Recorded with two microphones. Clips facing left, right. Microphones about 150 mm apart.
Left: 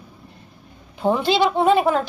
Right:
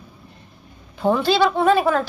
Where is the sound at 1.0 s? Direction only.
20° left (ahead or behind).